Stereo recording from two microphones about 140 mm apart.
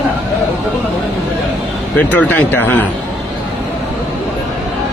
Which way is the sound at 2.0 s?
10° left (ahead or behind).